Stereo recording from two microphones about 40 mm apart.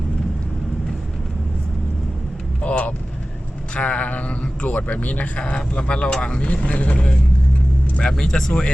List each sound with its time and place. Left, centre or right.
2.6 s vehicle: left
3.8 s a man's voice: left
5.4 s speech: left
8.2 s speech: centre